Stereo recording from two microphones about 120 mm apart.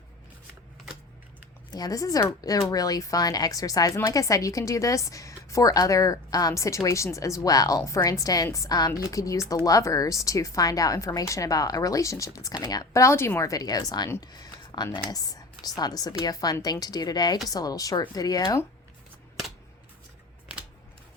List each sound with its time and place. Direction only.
1.7 s a woman's voice: 30° left (ahead or behind)
14.2 s a sound: 35° left (ahead or behind)
14.9 s a woman's voice: 30° left (ahead or behind)